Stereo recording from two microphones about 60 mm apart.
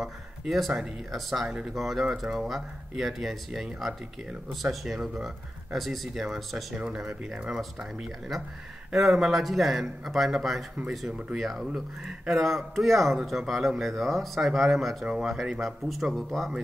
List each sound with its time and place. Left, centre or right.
0.0 s speech: centre